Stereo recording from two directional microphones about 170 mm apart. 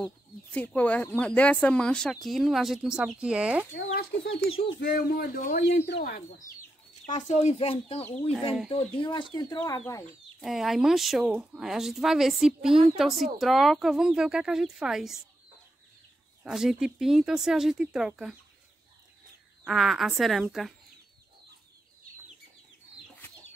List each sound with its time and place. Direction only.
0.0 s speech: 10° left (ahead or behind)
3.7 s speech: 80° left
4.9 s speech: 65° left (ahead or behind)
7.2 s speech: 40° left (ahead or behind); by 9.6 s 25° left (ahead or behind)
10.4 s speech: centre (ahead or behind)
16.4 s speech: 5° right (ahead or behind)
19.6 s speech: centre (ahead or behind)